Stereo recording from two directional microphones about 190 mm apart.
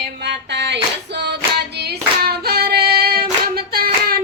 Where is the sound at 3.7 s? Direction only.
55° right (ahead or behind).